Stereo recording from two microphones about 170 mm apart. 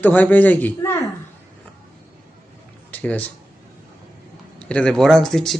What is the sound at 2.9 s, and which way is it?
Speech, 10° left (ahead or behind).